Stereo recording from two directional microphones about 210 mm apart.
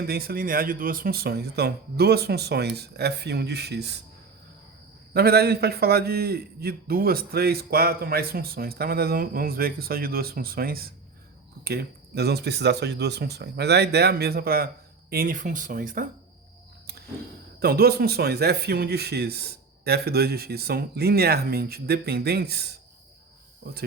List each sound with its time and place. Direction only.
0.1 s a man's voice: 45° right (ahead or behind)
5.1 s a man's voice: 50° right (ahead or behind)
17.6 s a man's voice: 45° right (ahead or behind)